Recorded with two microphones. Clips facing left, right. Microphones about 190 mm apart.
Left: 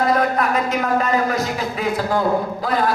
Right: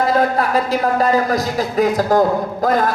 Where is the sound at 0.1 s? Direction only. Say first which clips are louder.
Right 2 dB; 30° right (ahead or behind).